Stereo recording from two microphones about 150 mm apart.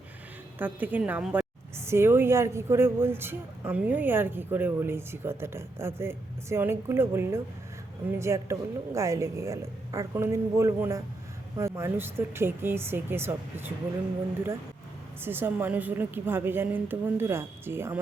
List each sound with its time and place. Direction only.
0.6 s a woman's voice: 10° right (ahead or behind)
15.2 s a woman's voice: 15° right (ahead or behind)